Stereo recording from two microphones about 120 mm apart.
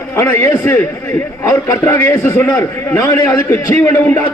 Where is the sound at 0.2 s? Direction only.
20° left (ahead or behind).